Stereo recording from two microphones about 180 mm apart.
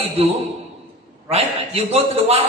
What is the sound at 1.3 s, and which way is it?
A man's voice, 35° right (ahead or behind).